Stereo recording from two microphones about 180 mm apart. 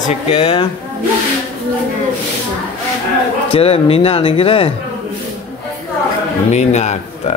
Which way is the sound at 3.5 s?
30° left (ahead or behind).